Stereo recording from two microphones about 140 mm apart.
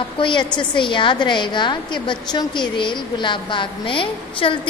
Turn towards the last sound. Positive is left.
turn(degrees=40)  # may be behind; listen again after turning